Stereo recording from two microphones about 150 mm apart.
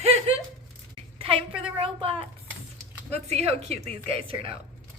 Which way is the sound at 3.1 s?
45° right (ahead or behind).